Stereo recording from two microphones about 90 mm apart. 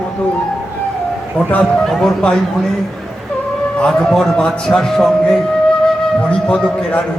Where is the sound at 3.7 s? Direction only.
10° left (ahead or behind).